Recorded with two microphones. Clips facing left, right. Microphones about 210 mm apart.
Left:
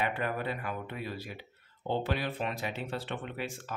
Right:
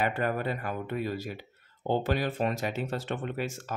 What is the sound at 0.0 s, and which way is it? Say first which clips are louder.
Speech: right 4 dB; 45° right (ahead or behind).